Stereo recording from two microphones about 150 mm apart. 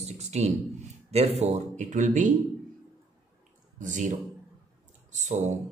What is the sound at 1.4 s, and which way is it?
Speech, 50° right (ahead or behind).